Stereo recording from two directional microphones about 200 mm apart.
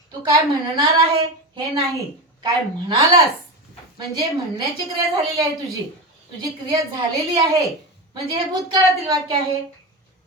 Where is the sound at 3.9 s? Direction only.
20° right (ahead or behind).